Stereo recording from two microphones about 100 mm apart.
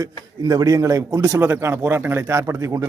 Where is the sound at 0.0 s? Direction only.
40° right (ahead or behind).